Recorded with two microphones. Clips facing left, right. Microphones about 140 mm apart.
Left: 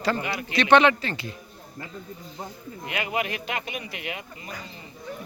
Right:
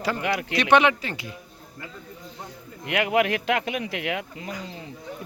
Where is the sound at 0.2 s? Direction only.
80° right.